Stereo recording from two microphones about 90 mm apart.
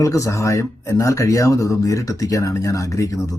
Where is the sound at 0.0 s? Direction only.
35° left (ahead or behind).